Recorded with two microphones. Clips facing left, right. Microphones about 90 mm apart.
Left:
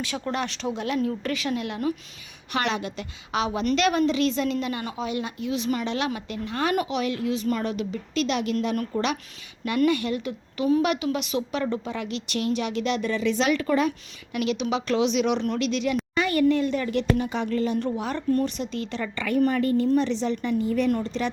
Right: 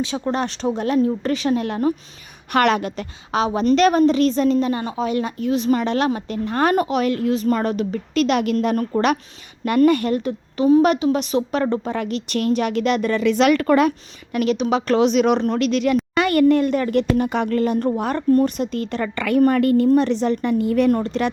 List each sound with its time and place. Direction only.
0.0 s a woman's voice: 30° right (ahead or behind)
2.5 s a woman's voice: 55° right (ahead or behind)
8.5 s a woman's voice: 40° right (ahead or behind); by 13.9 s 60° right (ahead or behind)
14.3 s a woman's voice: 40° right (ahead or behind)
16.1 s a woman's voice: 65° right (ahead or behind)